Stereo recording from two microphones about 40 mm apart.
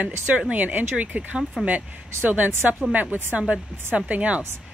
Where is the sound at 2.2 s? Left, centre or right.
Right.